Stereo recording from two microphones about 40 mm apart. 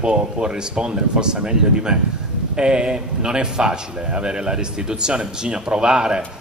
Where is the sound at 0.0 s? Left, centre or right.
Right.